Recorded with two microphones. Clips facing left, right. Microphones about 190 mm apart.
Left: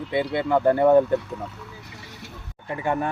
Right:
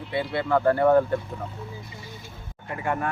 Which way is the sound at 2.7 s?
25° left (ahead or behind).